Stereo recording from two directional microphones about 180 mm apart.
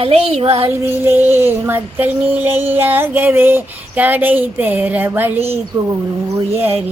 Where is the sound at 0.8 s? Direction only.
10° right (ahead or behind).